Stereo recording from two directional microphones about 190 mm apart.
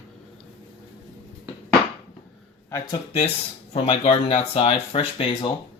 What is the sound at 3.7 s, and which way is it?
Speech, 30° left (ahead or behind).